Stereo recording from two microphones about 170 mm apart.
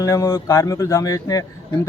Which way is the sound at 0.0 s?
20° left (ahead or behind).